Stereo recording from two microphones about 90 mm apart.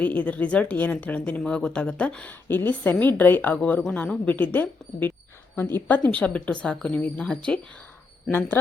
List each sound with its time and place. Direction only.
0.0 s a woman's voice: 20° left (ahead or behind)
8.3 s a woman's voice: 20° left (ahead or behind)